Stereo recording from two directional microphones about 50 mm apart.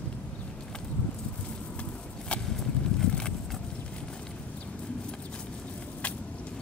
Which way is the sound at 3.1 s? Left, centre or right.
Centre.